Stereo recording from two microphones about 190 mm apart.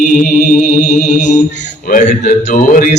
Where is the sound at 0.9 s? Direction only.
40° left (ahead or behind).